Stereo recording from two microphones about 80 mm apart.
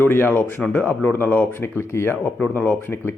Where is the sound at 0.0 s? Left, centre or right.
Left.